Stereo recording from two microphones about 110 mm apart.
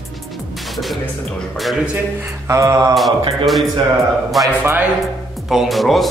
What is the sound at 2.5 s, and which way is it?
Mantra, 30° right (ahead or behind).